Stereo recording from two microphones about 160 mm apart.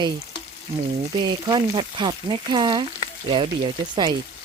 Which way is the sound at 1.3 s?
30° right (ahead or behind).